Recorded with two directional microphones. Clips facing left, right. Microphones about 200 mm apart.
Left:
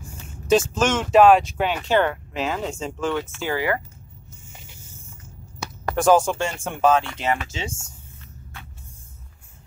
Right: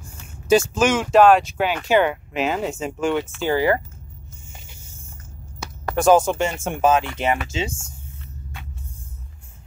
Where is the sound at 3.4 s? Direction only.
30° right (ahead or behind).